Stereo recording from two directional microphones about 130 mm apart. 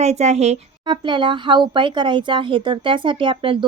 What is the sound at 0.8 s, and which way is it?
A woman's voice, 35° right (ahead or behind).